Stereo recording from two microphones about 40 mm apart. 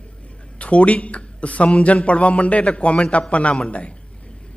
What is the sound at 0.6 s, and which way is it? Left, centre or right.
A man's voice, left.